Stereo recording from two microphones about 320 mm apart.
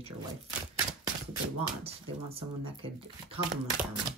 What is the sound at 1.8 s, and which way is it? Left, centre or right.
Speech, centre.